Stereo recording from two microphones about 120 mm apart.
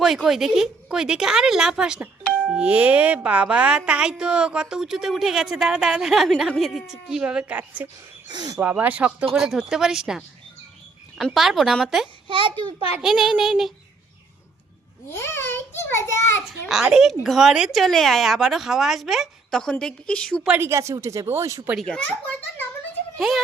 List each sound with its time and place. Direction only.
0.0 s speech: centre (ahead or behind)
8.3 s speech: 40° right (ahead or behind)
8.7 s speech: 10° right (ahead or behind)
12.3 s a child's voice: 45° right (ahead or behind)
13.0 s speech: 5° right (ahead or behind)
15.1 s a child's voice: 20° left (ahead or behind)
16.5 s a child's voice: 5° right (ahead or behind)
20.6 s speech: 25° right (ahead or behind)
21.8 s a child's voice: 10° left (ahead or behind)
23.1 s a woman's voice: centre (ahead or behind)